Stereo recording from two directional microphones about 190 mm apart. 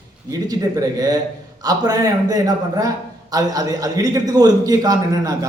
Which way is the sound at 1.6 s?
20° right (ahead or behind).